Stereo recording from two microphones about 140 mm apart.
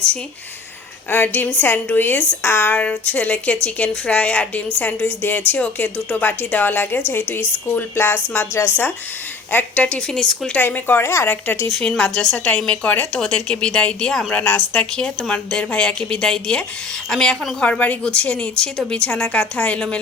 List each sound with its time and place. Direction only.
1.1 s a woman's voice: 15° left (ahead or behind)
11.7 s a woman's voice: centre (ahead or behind)